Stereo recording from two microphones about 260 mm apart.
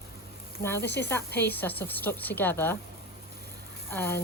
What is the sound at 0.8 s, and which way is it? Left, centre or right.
Speech, left.